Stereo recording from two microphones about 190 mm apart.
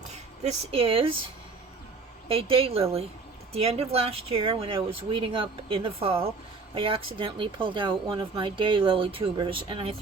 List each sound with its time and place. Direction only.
0.4 s speech: 30° right (ahead or behind)
2.2 s a woman's voice: 30° right (ahead or behind)